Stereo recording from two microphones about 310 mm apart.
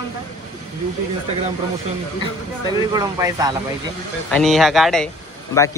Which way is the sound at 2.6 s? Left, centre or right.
Centre.